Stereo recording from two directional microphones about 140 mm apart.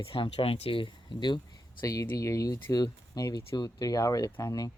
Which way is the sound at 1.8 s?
20° left (ahead or behind).